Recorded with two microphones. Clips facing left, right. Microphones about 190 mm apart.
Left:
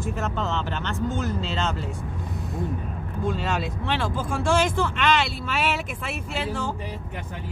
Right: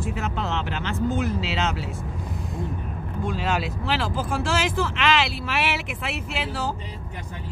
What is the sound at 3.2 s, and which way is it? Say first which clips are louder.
Speech: even; centre (ahead or behind).